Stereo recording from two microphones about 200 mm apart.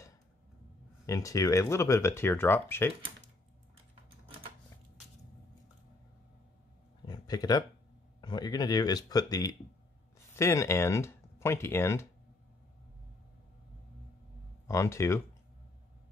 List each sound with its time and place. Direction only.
1.0 s speech: 15° left (ahead or behind)
7.1 s a sound: 20° left (ahead or behind)
8.2 s speech: 20° left (ahead or behind)
14.7 s speech: 15° left (ahead or behind)